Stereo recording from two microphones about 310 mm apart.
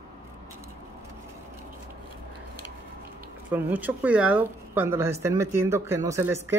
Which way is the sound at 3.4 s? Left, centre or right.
Centre.